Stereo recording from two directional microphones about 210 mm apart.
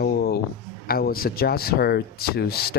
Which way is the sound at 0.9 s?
45° left (ahead or behind).